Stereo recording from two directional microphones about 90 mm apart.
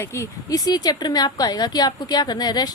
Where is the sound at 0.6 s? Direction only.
45° left (ahead or behind).